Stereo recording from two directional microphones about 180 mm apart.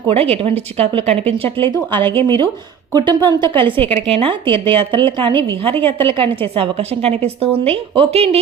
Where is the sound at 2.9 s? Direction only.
25° right (ahead or behind).